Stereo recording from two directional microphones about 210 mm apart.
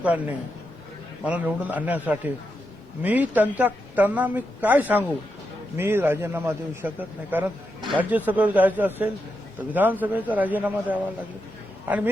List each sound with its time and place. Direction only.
0.0 s a man's voice: 5° right (ahead or behind)